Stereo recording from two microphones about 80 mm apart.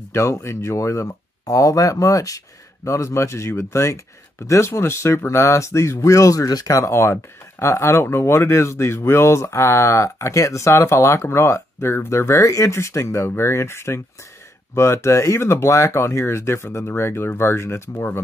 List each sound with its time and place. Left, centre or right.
0.1 s speech: left